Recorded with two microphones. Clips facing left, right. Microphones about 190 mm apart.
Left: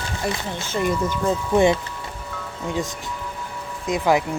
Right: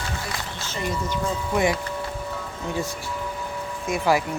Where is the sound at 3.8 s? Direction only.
20° left (ahead or behind).